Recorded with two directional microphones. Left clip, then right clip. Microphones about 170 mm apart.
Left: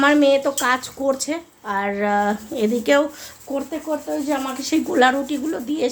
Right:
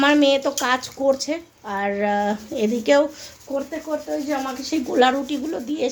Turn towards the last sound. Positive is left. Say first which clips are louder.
# left 2 dB
turn(degrees=5)  # may be behind; listen again after turning